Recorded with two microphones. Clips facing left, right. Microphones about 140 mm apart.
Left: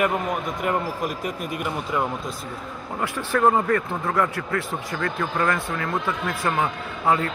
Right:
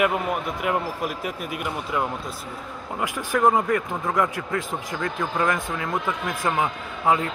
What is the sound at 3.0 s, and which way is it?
Speech, 15° right (ahead or behind).